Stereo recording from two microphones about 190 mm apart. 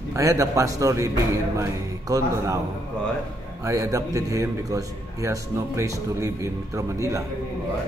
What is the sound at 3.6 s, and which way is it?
A man's voice, 15° right (ahead or behind).